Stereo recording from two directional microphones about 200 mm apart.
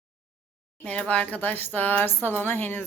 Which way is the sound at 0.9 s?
5° left (ahead or behind).